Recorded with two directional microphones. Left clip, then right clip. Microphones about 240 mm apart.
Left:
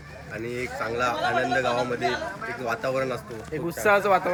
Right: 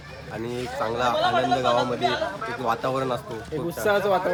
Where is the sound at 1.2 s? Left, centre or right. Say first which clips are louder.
Right 3 dB; right.